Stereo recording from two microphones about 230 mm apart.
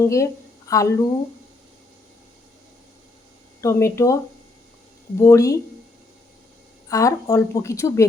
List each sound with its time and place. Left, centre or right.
0.0 s a woman's voice: centre
3.6 s a woman's voice: centre
5.2 s a woman's voice: centre
6.8 s a woman's voice: centre